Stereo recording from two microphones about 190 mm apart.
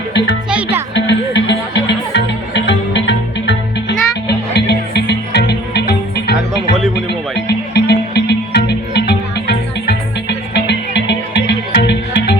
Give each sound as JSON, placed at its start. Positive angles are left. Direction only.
{"t": 0.9, "sound": "music", "side_deg": 70}